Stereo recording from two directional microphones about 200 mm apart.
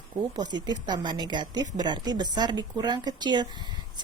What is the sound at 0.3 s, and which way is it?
A woman's voice, 20° right (ahead or behind).